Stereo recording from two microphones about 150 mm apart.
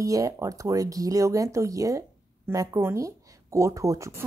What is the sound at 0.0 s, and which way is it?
Speech, 20° right (ahead or behind).